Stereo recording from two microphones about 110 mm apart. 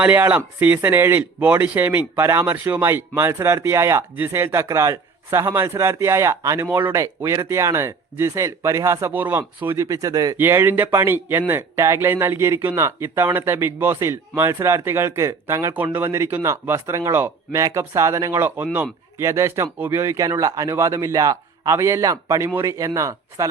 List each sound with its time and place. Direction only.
0.0 s a man's voice: 15° right (ahead or behind)
9.7 s speech: 30° right (ahead or behind)
10.3 s a man's voice: 20° right (ahead or behind)